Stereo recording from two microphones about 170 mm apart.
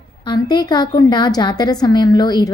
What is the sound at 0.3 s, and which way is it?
A woman's voice, 25° left (ahead or behind).